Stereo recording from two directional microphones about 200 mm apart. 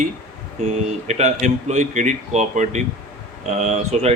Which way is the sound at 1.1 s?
35° right (ahead or behind).